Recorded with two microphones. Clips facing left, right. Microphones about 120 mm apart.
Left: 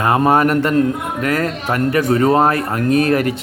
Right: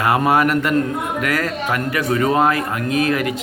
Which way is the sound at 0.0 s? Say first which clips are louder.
Left 2 dB; 30° left (ahead or behind).